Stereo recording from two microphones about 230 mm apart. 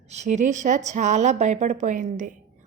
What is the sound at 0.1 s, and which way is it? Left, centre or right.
A woman's voice, right.